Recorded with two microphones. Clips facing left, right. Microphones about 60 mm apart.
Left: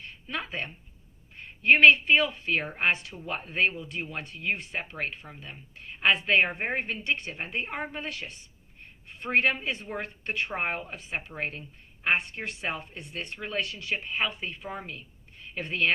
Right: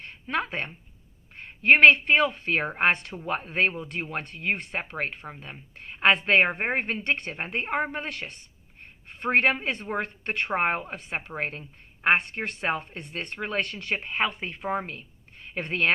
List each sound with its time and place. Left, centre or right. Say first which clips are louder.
0.0 s a sound: right 6 dB; right
1.6 s speech: right 2 dB; right
12.0 s speech: right 4 dB; right